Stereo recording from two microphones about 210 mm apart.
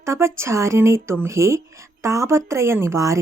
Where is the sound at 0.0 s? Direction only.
15° right (ahead or behind).